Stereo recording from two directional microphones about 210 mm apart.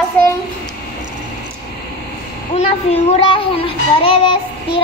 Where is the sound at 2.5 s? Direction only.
30° left (ahead or behind).